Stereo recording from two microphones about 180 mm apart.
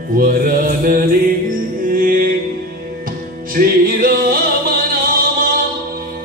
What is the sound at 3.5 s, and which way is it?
Music, 55° right (ahead or behind).